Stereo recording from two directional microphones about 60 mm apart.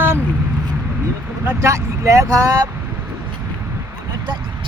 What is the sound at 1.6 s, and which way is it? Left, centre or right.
Speech, right.